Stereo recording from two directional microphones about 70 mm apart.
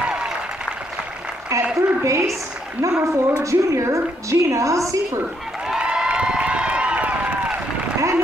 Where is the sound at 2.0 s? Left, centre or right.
Right.